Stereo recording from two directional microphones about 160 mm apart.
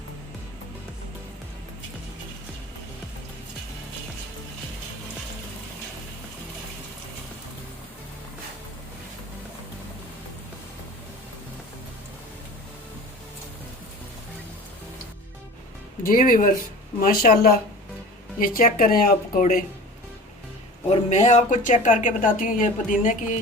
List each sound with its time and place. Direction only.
16.0 s a woman's voice: 60° left (ahead or behind)
20.9 s speech: 45° left (ahead or behind)